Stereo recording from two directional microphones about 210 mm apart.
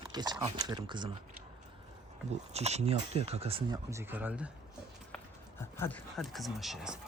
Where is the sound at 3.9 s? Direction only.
10° right (ahead or behind).